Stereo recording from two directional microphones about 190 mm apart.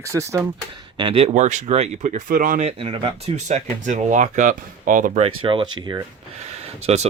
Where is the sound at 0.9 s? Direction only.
30° right (ahead or behind).